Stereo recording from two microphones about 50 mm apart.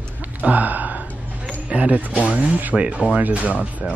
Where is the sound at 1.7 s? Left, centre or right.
Right.